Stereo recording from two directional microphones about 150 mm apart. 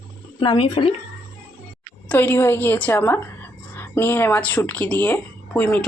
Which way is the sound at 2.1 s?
15° left (ahead or behind).